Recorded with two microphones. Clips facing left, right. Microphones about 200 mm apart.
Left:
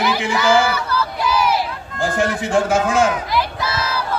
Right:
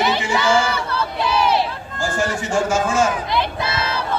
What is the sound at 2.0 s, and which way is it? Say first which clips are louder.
A man's voice: left 3 dB; 60° left (ahead or behind).